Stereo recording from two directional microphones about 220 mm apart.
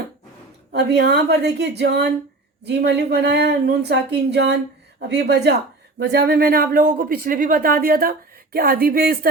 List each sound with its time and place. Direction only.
0.7 s speech: 50° right (ahead or behind)